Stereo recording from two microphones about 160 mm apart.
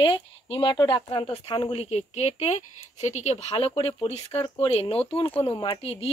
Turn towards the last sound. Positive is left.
turn(degrees=35)  # may be behind; listen again after turning